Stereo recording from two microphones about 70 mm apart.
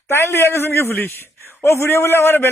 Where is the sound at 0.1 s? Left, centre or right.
Left.